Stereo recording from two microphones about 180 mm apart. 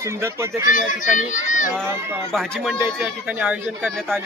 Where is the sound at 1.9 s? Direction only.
10° right (ahead or behind).